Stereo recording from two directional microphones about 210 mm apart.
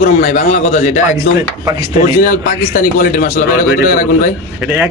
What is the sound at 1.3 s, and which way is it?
Speech, 15° right (ahead or behind).